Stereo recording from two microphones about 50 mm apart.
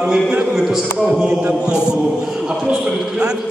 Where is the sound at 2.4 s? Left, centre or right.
Centre.